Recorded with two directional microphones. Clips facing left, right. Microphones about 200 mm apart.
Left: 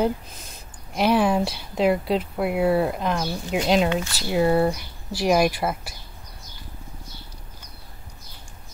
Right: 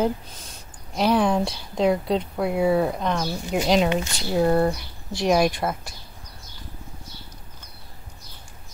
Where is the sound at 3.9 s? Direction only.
15° right (ahead or behind).